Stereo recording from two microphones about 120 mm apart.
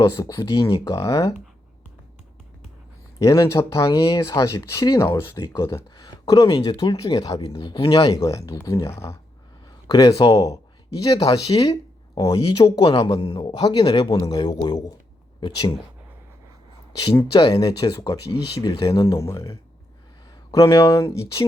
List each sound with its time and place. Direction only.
0.0 s speech: 30° left (ahead or behind)
3.2 s speech: 25° left (ahead or behind)
8.1 s speech: 25° left (ahead or behind)
12.7 s speech: 45° left (ahead or behind)
13.6 s speech: 35° left (ahead or behind)
17.0 s speech: 30° left (ahead or behind)